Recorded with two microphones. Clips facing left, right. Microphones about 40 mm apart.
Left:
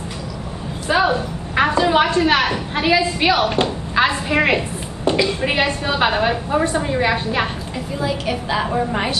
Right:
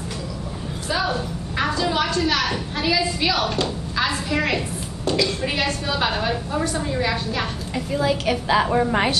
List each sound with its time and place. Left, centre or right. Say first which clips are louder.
0.8 s a sound: left 7 dB; left
2.7 s a woman's voice: left 6 dB; left
7.9 s a woman's voice: right 1 dB; centre